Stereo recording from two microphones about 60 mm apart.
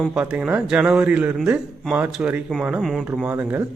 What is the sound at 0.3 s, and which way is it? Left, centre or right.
Speech, centre.